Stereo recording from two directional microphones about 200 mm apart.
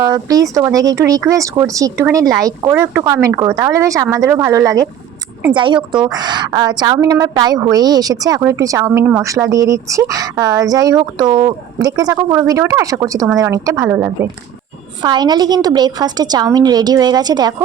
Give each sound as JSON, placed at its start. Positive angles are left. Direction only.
{"t": 0.0, "sound": "a woman's voice", "side_deg": -20}